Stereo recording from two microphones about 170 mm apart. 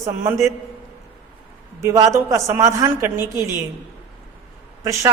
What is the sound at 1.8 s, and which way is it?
A woman's voice, 20° right (ahead or behind).